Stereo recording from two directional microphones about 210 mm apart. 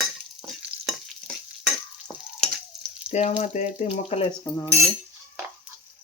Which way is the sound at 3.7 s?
30° left (ahead or behind).